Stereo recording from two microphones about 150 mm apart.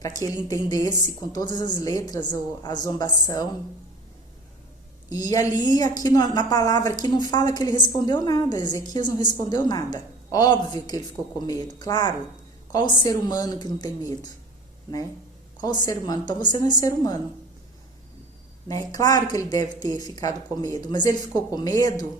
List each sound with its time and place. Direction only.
0.0 s a woman's voice: 20° left (ahead or behind)
5.0 s a woman's voice: 25° left (ahead or behind)
15.6 s a woman's voice: 25° left (ahead or behind)
18.7 s a woman's voice: 25° left (ahead or behind)